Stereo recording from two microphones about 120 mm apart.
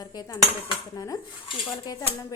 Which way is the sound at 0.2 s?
30° left (ahead or behind).